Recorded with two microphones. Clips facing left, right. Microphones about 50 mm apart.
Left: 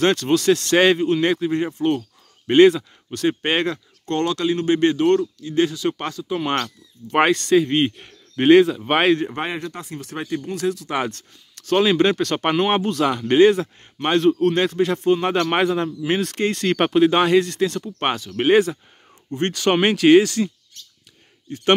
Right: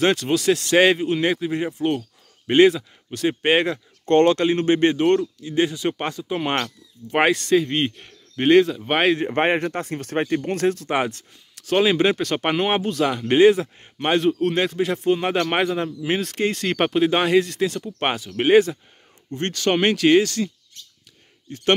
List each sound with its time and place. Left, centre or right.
0.0 s speech: centre
4.0 s speech: right; by 9.1 s centre
9.3 s speech: right
10.9 s a man's voice: centre